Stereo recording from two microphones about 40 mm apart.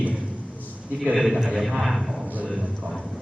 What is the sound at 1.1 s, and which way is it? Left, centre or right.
Speech, centre.